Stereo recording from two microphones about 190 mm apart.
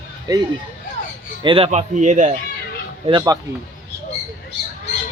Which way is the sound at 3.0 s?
20° right (ahead or behind).